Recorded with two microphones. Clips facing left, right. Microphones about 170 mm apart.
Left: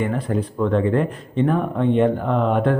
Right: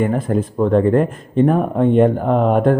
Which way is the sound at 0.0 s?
45° right (ahead or behind).